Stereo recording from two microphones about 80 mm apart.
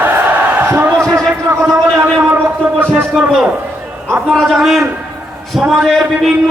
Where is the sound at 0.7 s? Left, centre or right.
Right.